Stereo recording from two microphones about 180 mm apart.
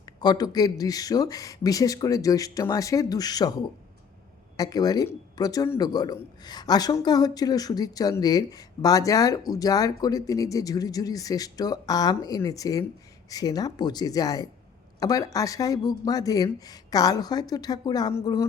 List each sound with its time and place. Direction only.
0.0 s a man's voice: 25° left (ahead or behind)
4.5 s a man's voice: 20° left (ahead or behind)